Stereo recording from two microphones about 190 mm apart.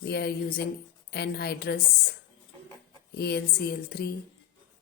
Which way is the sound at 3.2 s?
55° left (ahead or behind).